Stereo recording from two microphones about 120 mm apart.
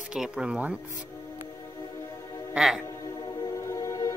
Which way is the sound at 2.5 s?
Centre (ahead or behind).